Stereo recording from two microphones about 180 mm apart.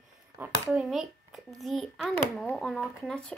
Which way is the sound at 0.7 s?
Centre (ahead or behind).